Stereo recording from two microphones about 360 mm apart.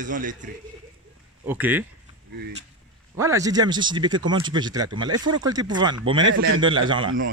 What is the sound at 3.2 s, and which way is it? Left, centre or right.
Speech, centre.